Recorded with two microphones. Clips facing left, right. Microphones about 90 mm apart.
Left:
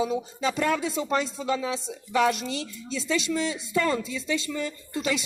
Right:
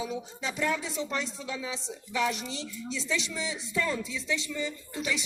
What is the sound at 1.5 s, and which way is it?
Speech, 75° left (ahead or behind).